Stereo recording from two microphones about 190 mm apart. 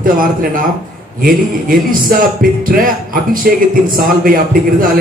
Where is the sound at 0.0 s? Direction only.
45° right (ahead or behind).